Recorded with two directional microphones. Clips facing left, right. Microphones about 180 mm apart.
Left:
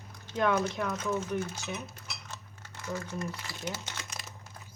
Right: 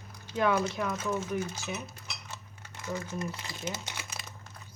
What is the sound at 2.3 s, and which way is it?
Cutlery, 15° right (ahead or behind).